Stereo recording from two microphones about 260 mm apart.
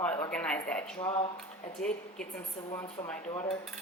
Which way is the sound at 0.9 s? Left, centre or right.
Centre.